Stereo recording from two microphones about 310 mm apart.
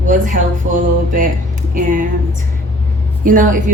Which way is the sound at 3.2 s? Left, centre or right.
Right.